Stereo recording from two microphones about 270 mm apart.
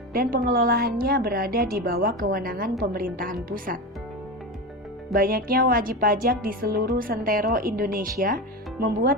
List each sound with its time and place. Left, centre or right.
0.1 s a woman's voice: right
5.1 s a woman's voice: right